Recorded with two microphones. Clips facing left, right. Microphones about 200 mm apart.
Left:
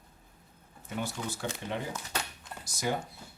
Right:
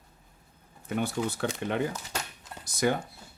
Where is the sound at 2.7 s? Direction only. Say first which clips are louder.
Right 6 dB; 60° right (ahead or behind).